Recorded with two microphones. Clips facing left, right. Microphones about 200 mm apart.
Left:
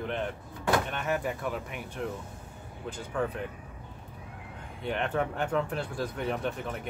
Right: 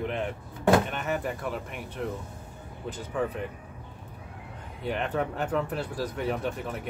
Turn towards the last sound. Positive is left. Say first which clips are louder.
# right 1 dB
turn(degrees=0)  # may be behind; listen again after turning